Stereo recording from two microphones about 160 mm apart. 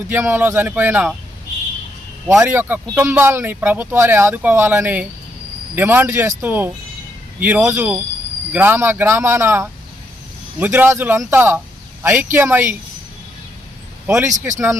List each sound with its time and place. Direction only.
0.1 s speech: 15° right (ahead or behind)
2.2 s speech: 10° right (ahead or behind)
14.3 s speech: 50° right (ahead or behind)